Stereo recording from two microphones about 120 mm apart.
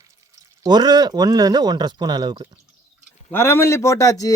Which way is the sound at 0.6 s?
35° right (ahead or behind).